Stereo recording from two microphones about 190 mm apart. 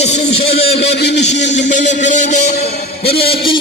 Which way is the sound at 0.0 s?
35° left (ahead or behind).